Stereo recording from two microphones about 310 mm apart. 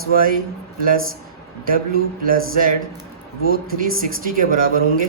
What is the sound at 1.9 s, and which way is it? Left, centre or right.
Speech, right.